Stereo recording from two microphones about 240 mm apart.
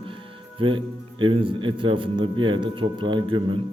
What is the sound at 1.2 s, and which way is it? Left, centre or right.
A man's voice, right.